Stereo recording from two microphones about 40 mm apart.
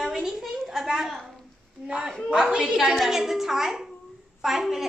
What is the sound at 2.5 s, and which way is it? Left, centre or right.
Speech, right.